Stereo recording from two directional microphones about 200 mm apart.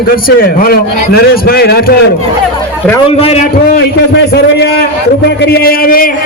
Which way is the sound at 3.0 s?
30° left (ahead or behind).